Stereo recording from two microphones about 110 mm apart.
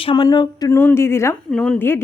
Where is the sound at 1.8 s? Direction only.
20° left (ahead or behind).